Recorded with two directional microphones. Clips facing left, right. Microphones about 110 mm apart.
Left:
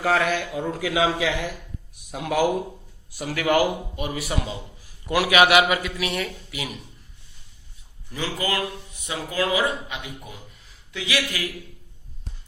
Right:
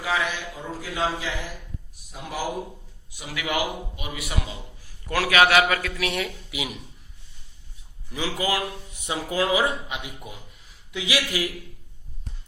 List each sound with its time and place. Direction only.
0.0 s a man's voice: 55° left (ahead or behind); by 1.3 s 80° left
2.0 s a man's voice: 65° left (ahead or behind)
3.2 s a man's voice: 45° left (ahead or behind); by 5.9 s 15° left (ahead or behind)
5.9 s speech: centre (ahead or behind)
8.1 s speech: 10° right (ahead or behind)